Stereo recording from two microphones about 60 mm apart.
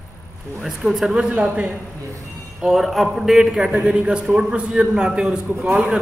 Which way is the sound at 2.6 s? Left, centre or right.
Centre.